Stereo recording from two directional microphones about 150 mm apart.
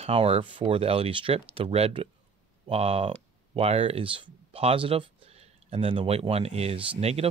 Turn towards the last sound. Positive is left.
turn(degrees=-40)  # may be behind; listen again after turning